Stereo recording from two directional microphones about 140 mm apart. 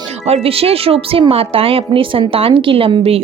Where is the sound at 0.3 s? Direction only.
45° right (ahead or behind).